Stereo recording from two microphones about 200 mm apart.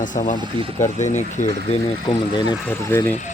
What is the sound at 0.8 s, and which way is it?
Speech, 35° left (ahead or behind).